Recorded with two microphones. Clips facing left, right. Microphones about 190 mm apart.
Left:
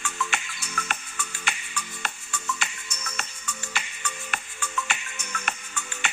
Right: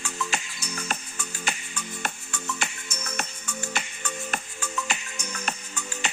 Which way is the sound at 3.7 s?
45° right (ahead or behind).